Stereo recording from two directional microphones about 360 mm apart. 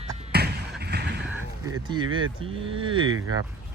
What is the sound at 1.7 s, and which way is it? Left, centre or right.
Speech, centre.